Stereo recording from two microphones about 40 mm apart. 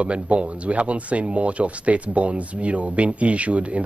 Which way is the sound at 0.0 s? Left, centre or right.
Right.